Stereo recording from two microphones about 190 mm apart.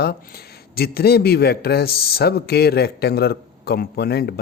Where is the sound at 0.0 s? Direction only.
55° left (ahead or behind).